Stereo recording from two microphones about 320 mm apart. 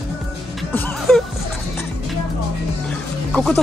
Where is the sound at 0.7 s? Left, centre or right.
Centre.